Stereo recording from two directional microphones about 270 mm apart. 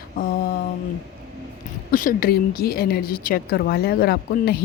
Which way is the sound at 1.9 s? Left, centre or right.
Left.